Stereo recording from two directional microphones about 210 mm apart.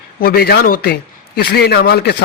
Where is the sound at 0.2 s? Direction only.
45° left (ahead or behind).